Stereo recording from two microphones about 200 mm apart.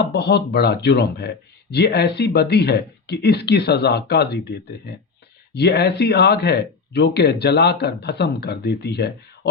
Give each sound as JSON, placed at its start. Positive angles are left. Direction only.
{"t": 0.0, "sound": "speech", "side_deg": 55}